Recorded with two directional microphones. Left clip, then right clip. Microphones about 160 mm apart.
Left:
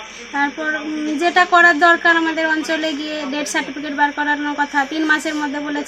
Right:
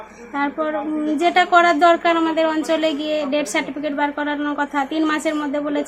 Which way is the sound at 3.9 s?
Centre (ahead or behind).